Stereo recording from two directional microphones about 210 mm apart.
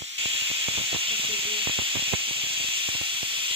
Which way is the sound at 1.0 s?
25° right (ahead or behind).